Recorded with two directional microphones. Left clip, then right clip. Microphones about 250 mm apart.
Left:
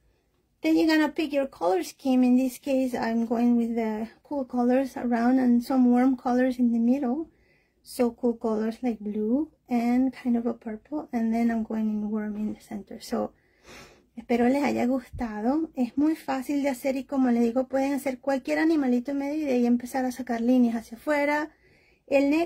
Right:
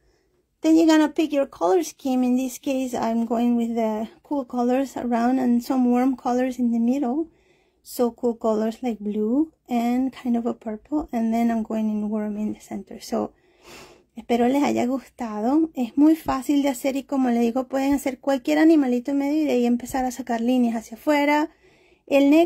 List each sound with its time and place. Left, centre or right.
0.6 s a woman's voice: right